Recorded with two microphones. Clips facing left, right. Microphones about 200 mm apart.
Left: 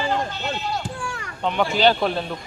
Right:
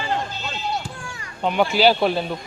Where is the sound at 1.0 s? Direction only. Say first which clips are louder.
Left 5 dB; 70° left (ahead or behind).